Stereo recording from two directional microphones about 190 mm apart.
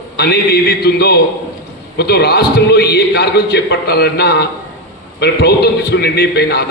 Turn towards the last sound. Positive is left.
turn(degrees=60)  # may be behind; listen again after turning